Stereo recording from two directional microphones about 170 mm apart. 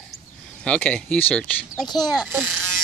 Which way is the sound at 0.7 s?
5° left (ahead or behind).